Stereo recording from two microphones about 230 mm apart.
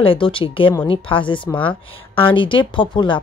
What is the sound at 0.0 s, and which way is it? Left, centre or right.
A woman's voice, left.